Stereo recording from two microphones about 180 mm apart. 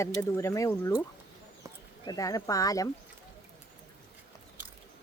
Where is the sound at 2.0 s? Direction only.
20° left (ahead or behind).